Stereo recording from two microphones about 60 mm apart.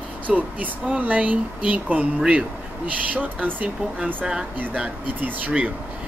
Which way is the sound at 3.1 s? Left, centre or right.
Right.